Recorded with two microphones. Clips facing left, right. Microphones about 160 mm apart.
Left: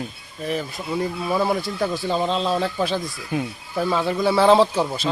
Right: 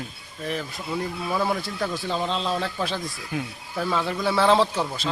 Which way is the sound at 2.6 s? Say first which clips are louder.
Left 5 dB; 15° left (ahead or behind).